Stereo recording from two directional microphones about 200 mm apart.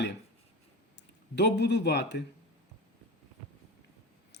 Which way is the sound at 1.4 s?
55° left (ahead or behind).